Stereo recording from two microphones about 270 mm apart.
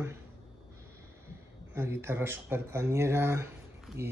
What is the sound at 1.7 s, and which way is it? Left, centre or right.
Speech, centre.